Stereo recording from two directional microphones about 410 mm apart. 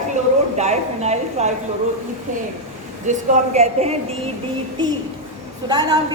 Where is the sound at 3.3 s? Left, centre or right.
Centre.